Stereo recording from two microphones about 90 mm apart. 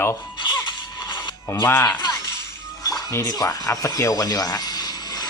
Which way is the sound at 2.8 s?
40° left (ahead or behind).